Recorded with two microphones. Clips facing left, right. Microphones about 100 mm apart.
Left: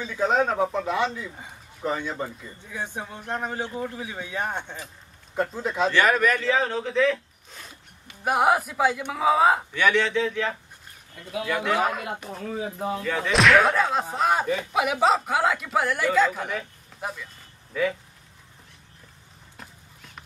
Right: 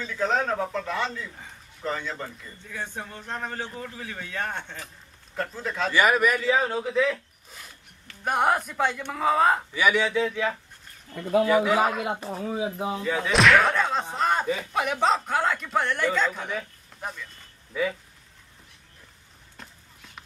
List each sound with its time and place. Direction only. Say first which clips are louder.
0.0 s a man's voice: left 3 dB; 15° left (ahead or behind)
5.9 s a man's voice: even; 10° right (ahead or behind)
8.1 s speech: left 2 dB; 5° left (ahead or behind)
9.8 s a man's voice: left 1 dB; 10° right (ahead or behind)
17.7 s a man's voice: left 2 dB; 10° right (ahead or behind)